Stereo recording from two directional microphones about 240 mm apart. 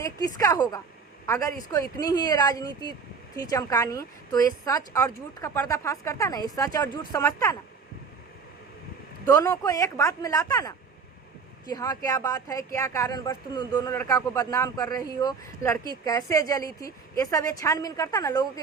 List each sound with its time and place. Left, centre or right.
0.0 s speech: centre
9.2 s speech: centre